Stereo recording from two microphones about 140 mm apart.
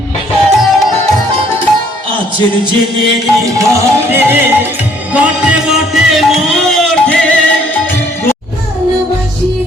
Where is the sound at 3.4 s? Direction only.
25° right (ahead or behind); by 8.3 s 15° left (ahead or behind).